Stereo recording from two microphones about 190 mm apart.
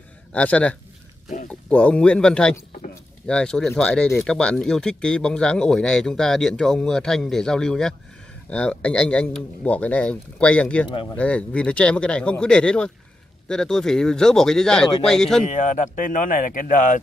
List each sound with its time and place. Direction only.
0.3 s speech: 5° left (ahead or behind)
16.0 s speech: 45° left (ahead or behind)